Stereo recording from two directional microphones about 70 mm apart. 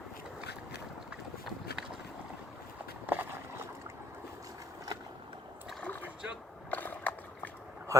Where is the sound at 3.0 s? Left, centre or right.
Right.